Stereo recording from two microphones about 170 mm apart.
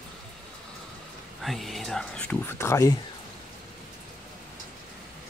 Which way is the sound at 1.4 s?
Centre (ahead or behind).